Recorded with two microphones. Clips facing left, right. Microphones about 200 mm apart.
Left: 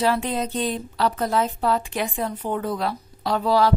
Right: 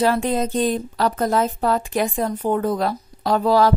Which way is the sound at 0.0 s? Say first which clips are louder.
Right 3 dB; 45° right (ahead or behind).